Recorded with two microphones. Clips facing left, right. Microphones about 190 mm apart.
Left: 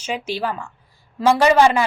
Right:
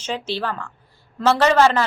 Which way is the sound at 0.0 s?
10° left (ahead or behind).